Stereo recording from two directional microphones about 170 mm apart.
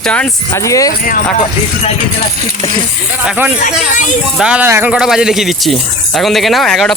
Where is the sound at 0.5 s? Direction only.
20° left (ahead or behind).